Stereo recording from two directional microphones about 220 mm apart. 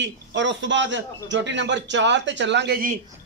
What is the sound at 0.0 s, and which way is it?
A man's voice, 55° right (ahead or behind).